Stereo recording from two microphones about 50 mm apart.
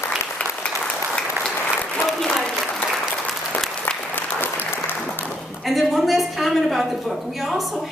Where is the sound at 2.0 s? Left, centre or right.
Centre.